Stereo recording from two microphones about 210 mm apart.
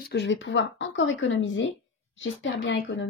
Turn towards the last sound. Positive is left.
turn(degrees=60)  # may be behind; listen again after turning